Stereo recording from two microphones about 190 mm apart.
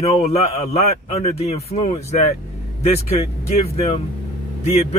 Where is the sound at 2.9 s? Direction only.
35° left (ahead or behind).